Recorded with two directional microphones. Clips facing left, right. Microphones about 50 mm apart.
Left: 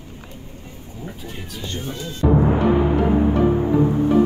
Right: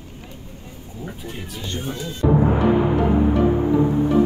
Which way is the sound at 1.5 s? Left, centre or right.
Right.